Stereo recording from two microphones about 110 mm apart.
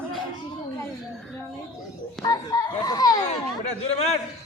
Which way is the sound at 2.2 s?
40° left (ahead or behind).